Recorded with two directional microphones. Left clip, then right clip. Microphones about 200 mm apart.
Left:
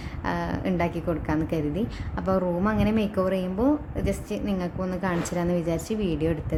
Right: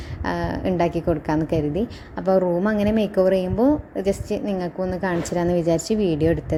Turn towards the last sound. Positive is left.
turn(degrees=-15)  # may be behind; listen again after turning